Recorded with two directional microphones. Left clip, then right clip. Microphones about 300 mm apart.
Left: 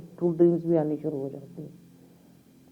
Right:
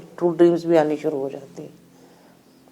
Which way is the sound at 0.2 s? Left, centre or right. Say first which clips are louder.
Right 6 dB; centre.